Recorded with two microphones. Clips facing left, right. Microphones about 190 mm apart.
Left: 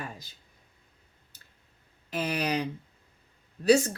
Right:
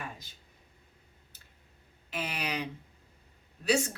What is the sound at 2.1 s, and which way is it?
Speech, 40° left (ahead or behind).